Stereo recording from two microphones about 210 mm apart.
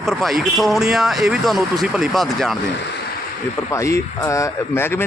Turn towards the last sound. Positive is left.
turn(degrees=10)  # may be behind; listen again after turning